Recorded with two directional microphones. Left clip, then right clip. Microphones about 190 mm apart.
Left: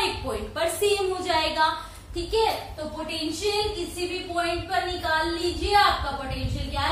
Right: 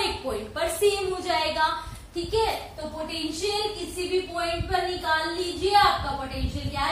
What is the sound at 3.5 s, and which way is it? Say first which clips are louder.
Speech: left 3 dB; 10° right (ahead or behind).